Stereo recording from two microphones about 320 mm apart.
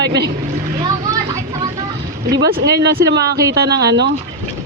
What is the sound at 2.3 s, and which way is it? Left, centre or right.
A man's voice, right.